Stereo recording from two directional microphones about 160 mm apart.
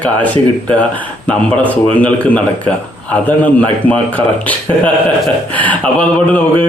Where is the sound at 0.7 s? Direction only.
10° left (ahead or behind).